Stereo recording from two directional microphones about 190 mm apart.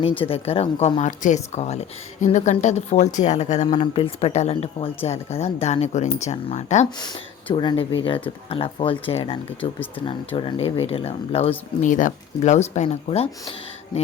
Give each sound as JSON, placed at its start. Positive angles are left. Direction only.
{"t": 0.0, "sound": "speech", "side_deg": 30}
{"t": 7.5, "sound": "speech", "side_deg": 25}